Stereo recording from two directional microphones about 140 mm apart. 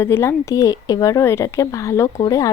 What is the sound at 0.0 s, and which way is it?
Speech, 15° left (ahead or behind).